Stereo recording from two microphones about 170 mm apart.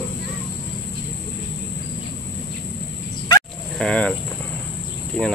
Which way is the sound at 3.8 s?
5° left (ahead or behind).